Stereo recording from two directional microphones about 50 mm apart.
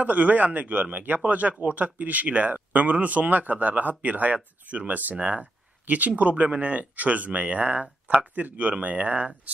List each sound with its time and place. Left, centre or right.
0.0 s speech: right